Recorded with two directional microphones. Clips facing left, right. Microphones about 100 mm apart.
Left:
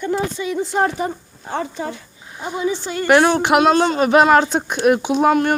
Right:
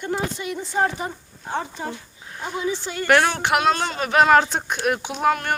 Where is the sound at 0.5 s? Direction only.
90° left.